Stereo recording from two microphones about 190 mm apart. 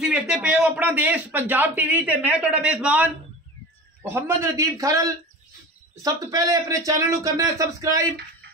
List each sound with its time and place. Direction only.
0.0 s speech: 5° right (ahead or behind)